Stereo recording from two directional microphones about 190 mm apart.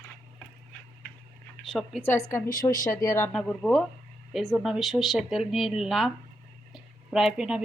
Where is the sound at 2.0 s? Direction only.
15° left (ahead or behind).